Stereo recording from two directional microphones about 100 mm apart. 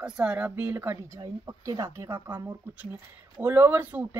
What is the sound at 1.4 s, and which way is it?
Speech, 35° right (ahead or behind).